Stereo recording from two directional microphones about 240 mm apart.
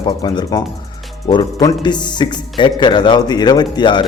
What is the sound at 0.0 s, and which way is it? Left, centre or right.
A man's voice, centre.